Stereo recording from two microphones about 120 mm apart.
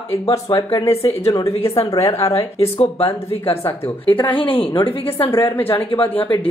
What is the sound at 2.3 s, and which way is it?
Speech, 50° left (ahead or behind).